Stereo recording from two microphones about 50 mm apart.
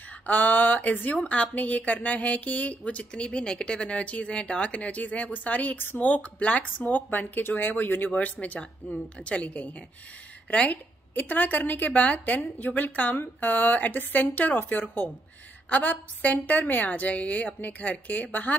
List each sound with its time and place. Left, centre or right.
0.3 s a woman's voice: left
8.5 s a woman's voice: left